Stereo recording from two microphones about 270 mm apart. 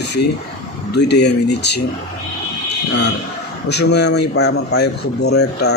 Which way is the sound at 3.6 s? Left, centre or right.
Left.